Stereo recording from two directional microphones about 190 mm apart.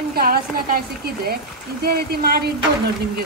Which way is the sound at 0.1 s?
50° right (ahead or behind).